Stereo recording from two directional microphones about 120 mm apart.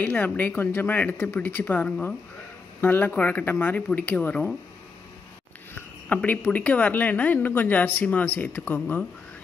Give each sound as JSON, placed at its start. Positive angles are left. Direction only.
{"t": 0.0, "sound": "a woman's voice", "side_deg": 15}
{"t": 5.8, "sound": "a woman's voice", "side_deg": 15}